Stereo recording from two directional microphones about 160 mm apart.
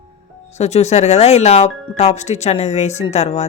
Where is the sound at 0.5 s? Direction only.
45° left (ahead or behind).